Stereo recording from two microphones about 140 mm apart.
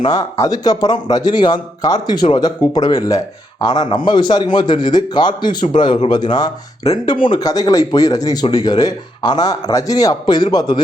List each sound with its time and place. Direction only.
0.0 s a man's voice: 25° left (ahead or behind)